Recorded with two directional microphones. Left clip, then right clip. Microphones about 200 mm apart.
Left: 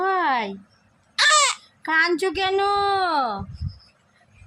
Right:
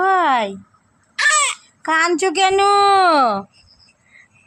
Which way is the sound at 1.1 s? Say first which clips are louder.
Right 1 dB; 15° left (ahead or behind).